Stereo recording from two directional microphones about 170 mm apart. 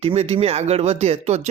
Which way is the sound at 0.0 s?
40° right (ahead or behind).